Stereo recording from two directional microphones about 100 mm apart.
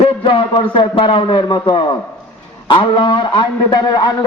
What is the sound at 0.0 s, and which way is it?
A man's voice, 60° left (ahead or behind).